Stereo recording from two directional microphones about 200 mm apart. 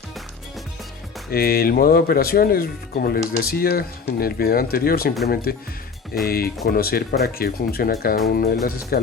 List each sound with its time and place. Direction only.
1.3 s speech: 50° left (ahead or behind)